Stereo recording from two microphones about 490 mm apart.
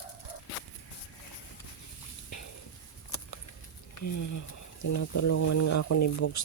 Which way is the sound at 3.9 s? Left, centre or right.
Left.